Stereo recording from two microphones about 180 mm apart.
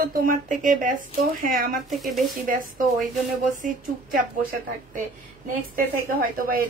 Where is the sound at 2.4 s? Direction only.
50° right (ahead or behind).